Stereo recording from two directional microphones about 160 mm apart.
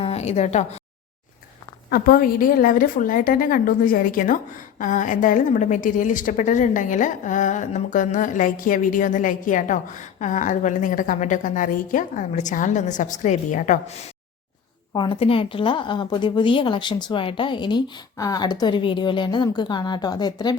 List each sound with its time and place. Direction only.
0.0 s speech: 40° left (ahead or behind)
1.9 s a woman's voice: 65° left (ahead or behind); by 14.0 s 45° left (ahead or behind)
14.9 s a woman's voice: 30° left (ahead or behind)